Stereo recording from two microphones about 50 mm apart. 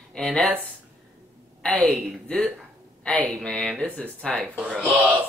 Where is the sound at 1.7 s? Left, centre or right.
Centre.